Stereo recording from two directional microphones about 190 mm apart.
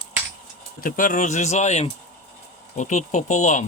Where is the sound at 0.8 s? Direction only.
45° left (ahead or behind).